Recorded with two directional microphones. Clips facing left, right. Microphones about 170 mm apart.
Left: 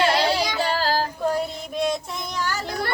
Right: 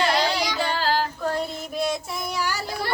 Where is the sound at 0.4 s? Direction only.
45° left (ahead or behind).